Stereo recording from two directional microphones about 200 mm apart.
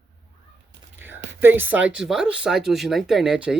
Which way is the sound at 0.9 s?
10° right (ahead or behind).